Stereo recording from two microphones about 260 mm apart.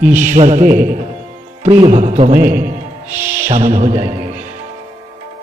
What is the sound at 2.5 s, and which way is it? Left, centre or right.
A man's voice, centre.